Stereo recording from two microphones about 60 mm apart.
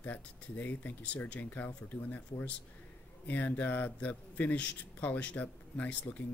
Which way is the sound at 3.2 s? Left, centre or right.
Left.